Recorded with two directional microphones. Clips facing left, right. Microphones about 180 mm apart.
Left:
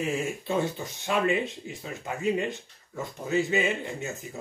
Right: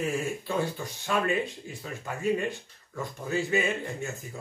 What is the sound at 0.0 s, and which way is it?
Speech, 20° left (ahead or behind).